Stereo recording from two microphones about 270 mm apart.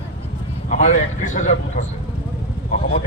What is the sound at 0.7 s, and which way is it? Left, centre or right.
Speech, left.